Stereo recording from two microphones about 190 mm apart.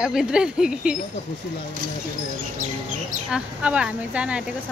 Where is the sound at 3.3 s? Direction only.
5° right (ahead or behind).